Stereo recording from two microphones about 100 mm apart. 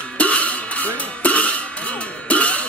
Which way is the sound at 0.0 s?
10° left (ahead or behind).